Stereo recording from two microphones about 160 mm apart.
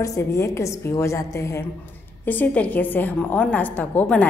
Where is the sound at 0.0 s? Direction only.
20° left (ahead or behind).